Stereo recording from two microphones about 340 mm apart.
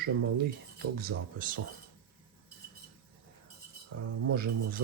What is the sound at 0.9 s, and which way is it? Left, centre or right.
Speech, right.